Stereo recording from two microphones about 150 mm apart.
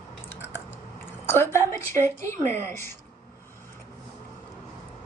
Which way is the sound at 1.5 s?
20° left (ahead or behind).